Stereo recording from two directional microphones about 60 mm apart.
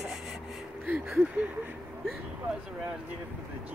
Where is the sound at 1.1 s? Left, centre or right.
Right.